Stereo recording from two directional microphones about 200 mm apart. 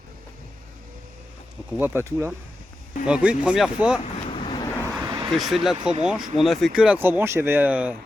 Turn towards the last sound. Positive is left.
turn(degrees=-5)  # may be behind; listen again after turning